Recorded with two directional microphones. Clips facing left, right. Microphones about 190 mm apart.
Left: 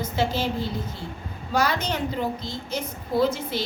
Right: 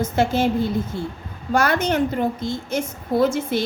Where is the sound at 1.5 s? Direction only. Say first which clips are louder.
Right 5 dB; 50° right (ahead or behind).